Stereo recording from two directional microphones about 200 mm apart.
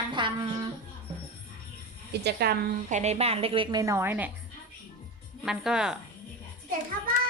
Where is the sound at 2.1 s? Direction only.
55° right (ahead or behind).